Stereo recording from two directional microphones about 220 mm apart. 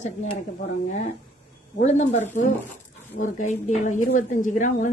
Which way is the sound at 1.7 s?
35° left (ahead or behind).